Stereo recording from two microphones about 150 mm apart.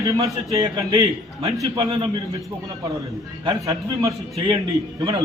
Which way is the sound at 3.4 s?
25° right (ahead or behind).